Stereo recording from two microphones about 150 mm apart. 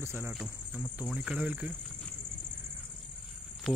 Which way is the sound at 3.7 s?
Centre (ahead or behind).